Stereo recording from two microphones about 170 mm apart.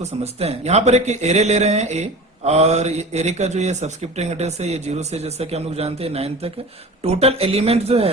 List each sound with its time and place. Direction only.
0.0 s speech: 40° right (ahead or behind)